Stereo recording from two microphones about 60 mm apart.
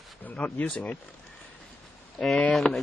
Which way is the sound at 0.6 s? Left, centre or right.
Left.